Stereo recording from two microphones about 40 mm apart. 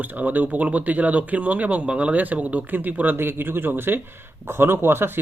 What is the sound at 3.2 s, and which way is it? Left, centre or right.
Speech, right.